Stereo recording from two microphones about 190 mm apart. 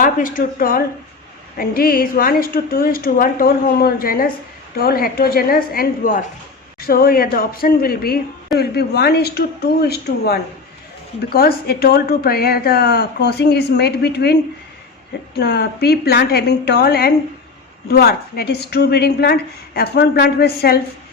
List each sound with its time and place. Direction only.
0.0 s a woman's voice: 45° left (ahead or behind)
15.4 s a woman's voice: 60° left (ahead or behind)